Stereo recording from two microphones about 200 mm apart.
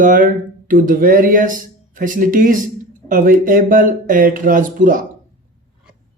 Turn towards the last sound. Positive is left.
turn(degrees=-40)  # may be behind; listen again after turning